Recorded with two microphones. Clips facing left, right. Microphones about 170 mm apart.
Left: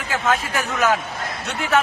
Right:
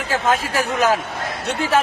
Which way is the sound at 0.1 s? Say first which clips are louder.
Right 2 dB; 35° right (ahead or behind).